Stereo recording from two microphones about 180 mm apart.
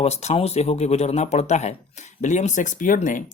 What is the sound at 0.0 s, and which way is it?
Speech, 35° left (ahead or behind).